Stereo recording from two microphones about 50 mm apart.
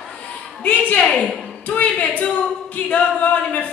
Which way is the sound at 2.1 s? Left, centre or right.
Left.